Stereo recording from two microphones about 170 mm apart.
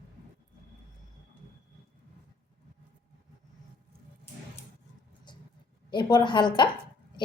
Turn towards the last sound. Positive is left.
turn(degrees=25)  # may be behind; listen again after turning